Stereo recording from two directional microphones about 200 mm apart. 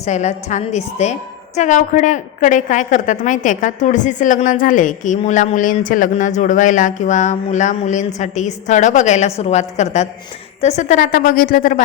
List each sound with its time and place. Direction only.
0.0 s a woman's voice: 35° left (ahead or behind)